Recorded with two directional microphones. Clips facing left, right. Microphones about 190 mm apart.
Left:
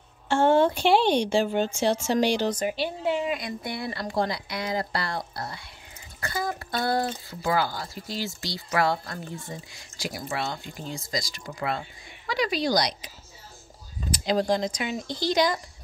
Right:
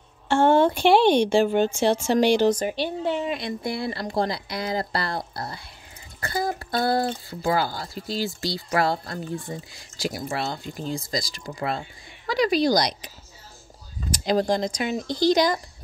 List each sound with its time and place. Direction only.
0.3 s a woman's voice: 60° right (ahead or behind)
2.8 s speech: 5° left (ahead or behind)
3.3 s speech: 30° right (ahead or behind)
14.1 s speech: 45° right (ahead or behind)